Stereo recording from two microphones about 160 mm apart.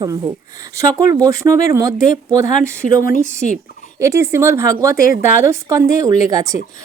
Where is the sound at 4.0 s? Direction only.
15° right (ahead or behind).